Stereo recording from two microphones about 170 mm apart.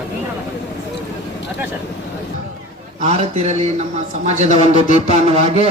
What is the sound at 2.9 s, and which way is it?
A man's voice, 40° right (ahead or behind).